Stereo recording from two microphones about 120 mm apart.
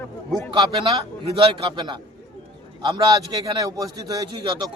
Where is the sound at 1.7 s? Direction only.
40° right (ahead or behind).